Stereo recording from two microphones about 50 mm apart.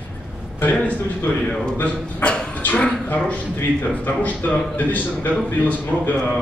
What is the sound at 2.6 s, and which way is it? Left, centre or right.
A man's voice, left.